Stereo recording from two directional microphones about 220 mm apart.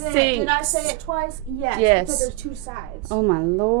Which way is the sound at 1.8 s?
20° right (ahead or behind).